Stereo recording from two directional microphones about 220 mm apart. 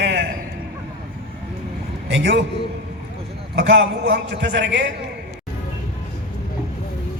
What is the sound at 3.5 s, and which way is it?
A man's voice, 55° right (ahead or behind).